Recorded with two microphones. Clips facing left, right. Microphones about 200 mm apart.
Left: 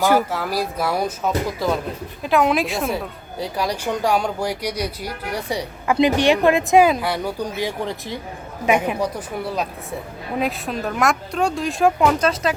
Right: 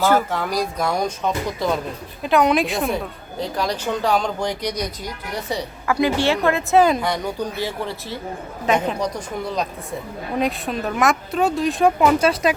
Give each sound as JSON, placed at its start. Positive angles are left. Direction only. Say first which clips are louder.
{"t": 0.0, "sound": "speech", "louder": "even", "side_deg": 10}
{"t": 12.3, "sound": "speech", "louder": "right 2 dB", "side_deg": -15}